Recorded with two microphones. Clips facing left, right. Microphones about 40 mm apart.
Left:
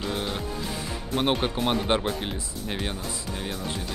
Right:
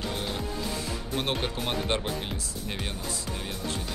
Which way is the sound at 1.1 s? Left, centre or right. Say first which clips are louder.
Left 6 dB; centre.